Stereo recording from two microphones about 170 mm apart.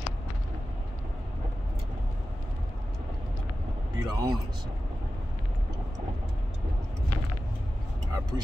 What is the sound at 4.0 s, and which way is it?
Speech, 20° right (ahead or behind).